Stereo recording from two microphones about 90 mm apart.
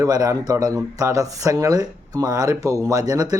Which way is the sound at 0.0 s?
45° right (ahead or behind).